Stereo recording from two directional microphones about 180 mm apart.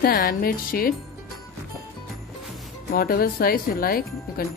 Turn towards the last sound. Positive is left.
turn(degrees=55)  # may be behind; listen again after turning